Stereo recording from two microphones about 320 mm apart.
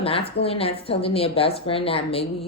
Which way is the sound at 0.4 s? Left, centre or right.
Centre.